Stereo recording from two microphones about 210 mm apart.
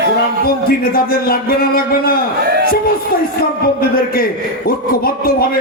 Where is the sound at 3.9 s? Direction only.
45° left (ahead or behind).